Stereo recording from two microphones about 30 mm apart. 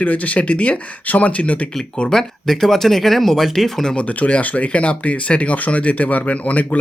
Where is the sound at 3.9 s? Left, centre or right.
Left.